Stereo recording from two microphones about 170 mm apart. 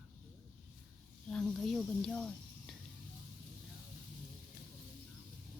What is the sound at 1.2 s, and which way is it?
Speech, 5° left (ahead or behind).